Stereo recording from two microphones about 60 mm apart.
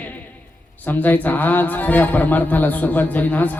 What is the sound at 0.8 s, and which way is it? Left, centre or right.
Speech, left.